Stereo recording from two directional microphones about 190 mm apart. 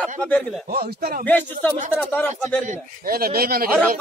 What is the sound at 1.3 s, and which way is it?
A man's voice, 10° left (ahead or behind).